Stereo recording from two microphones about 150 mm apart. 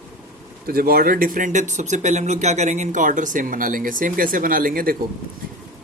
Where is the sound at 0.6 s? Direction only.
85° right.